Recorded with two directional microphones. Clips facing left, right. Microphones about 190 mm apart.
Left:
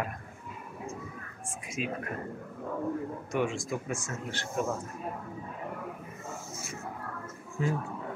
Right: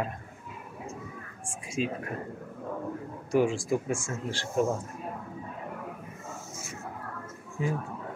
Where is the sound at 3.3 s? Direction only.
30° right (ahead or behind).